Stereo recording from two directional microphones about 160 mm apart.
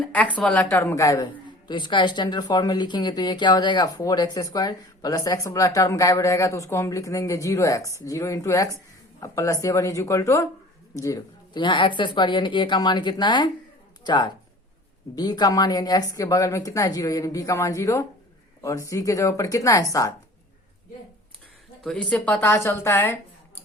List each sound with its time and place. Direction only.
0.1 s a woman's voice: 10° left (ahead or behind)
22.1 s a woman's voice: 10° left (ahead or behind)